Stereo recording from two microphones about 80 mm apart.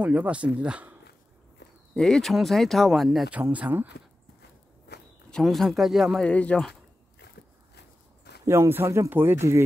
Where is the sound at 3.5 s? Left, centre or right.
Right.